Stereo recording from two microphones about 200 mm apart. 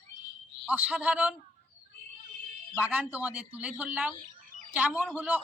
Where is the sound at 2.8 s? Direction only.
5° right (ahead or behind).